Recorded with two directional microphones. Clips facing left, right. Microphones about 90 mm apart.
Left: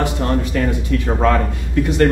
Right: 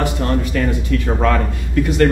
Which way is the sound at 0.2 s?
25° left (ahead or behind).